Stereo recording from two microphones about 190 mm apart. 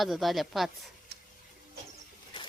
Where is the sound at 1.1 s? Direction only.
60° right (ahead or behind).